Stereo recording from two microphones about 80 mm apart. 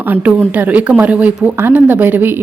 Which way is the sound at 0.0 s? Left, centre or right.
Right.